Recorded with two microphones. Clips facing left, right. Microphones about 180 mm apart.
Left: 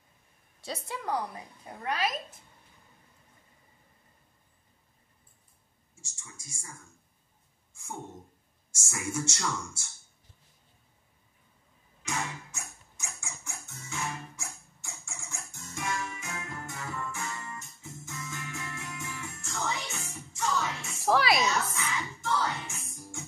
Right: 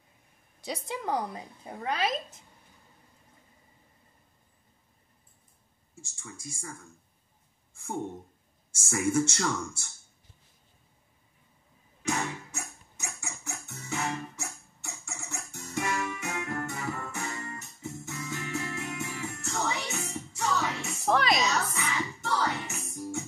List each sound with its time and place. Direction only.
0.7 s a woman's voice: 20° right (ahead or behind)
5.9 s speech: 55° right (ahead or behind)
8.7 s speech: 55° right (ahead or behind)
12.0 s music: 60° right (ahead or behind)
21.0 s a sound: 5° left (ahead or behind)
21.7 s music: 65° right (ahead or behind)